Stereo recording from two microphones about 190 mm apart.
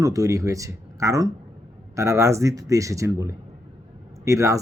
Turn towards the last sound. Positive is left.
turn(degrees=-15)  # may be behind; listen again after turning